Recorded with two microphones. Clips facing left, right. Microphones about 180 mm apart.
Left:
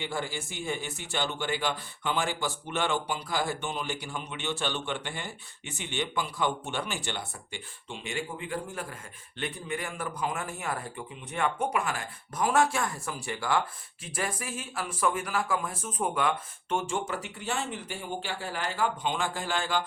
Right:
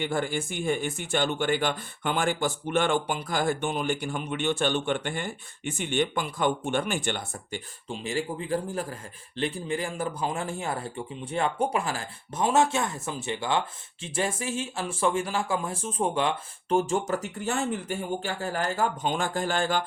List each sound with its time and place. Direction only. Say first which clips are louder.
0.0 s a man's voice: right 6 dB; 55° right (ahead or behind)